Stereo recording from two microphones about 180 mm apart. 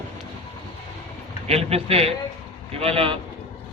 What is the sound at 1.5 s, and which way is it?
A man's voice, 35° right (ahead or behind).